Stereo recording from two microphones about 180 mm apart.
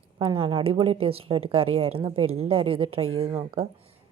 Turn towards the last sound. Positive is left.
turn(degrees=-30)  # may be behind; listen again after turning